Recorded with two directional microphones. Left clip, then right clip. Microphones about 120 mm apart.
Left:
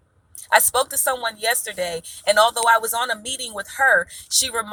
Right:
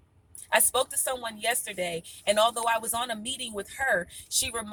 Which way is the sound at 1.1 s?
20° right (ahead or behind).